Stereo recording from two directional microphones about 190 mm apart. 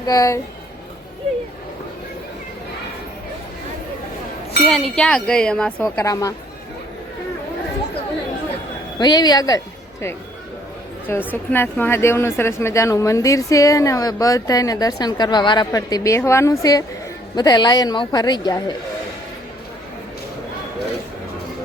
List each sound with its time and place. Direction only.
0.0 s speech: 20° left (ahead or behind)
4.7 s speech: 5° left (ahead or behind)
5.8 s speech: 15° left (ahead or behind)
9.0 s a man's voice: 20° left (ahead or behind)
11.0 s a man's voice: 10° left (ahead or behind)